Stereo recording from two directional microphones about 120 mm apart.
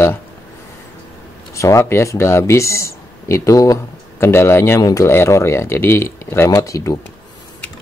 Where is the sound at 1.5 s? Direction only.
25° left (ahead or behind).